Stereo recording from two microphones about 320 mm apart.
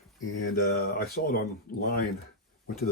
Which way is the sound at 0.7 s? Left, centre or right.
Left.